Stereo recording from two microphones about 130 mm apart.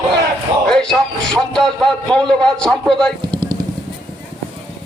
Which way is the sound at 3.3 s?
35° right (ahead or behind).